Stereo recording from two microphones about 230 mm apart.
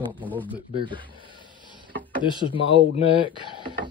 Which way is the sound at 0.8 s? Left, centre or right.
Right.